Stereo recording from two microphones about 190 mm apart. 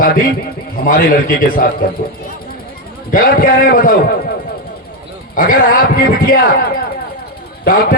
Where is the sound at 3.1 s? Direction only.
45° left (ahead or behind).